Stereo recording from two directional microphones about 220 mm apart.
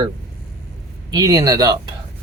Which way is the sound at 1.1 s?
15° right (ahead or behind).